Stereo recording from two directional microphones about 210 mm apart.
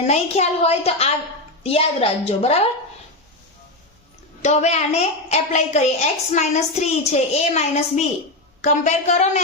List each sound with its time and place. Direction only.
0.1 s a woman's voice: 30° left (ahead or behind)
4.4 s a woman's voice: 30° left (ahead or behind)